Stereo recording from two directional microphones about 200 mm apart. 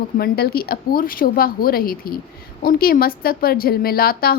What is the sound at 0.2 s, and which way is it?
A woman's voice, 50° left (ahead or behind).